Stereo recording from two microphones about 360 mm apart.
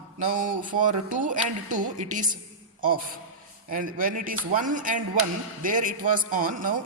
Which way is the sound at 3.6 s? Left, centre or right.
Right.